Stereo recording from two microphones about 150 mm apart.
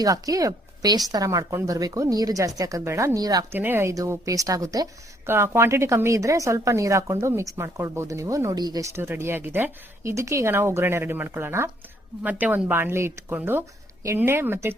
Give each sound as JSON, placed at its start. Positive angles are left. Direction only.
{"t": 0.0, "sound": "a woman's voice", "side_deg": -25}
{"t": 3.6, "sound": "a woman's voice", "side_deg": -15}